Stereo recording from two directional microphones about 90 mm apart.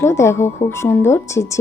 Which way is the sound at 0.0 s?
30° left (ahead or behind).